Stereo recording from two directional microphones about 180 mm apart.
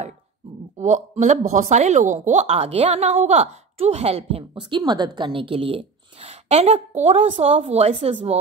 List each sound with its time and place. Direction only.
0.7 s a woman's voice: 40° right (ahead or behind)